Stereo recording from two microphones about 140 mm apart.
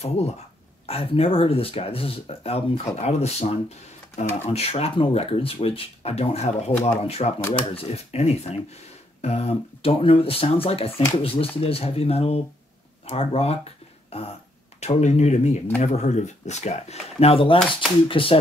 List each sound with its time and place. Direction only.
0.0 s speech: 50° left (ahead or behind)